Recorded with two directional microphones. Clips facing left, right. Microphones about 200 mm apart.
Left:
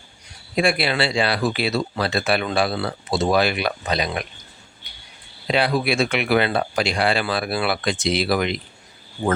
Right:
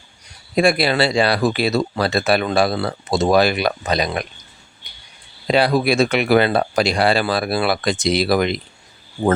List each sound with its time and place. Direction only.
0.5 s speech: 40° right (ahead or behind)
5.5 s speech: 40° right (ahead or behind)